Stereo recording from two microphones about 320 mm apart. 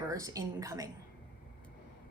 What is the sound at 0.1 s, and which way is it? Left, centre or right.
Speech, centre.